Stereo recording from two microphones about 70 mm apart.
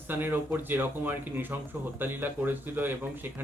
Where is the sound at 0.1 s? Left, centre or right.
Right.